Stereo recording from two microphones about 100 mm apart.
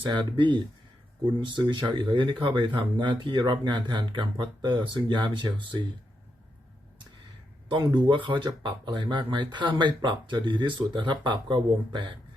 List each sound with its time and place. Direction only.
0.1 s speech: 50° right (ahead or behind)
8.0 s speech: 50° right (ahead or behind)